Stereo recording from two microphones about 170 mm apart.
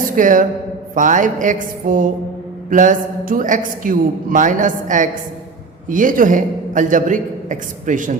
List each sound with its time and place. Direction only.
0.2 s a man's voice: 50° right (ahead or behind)